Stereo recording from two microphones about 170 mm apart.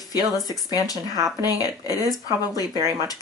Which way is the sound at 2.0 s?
20° right (ahead or behind).